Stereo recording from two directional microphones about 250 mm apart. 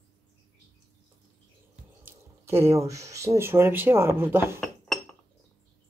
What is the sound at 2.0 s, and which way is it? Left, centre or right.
Speech, centre.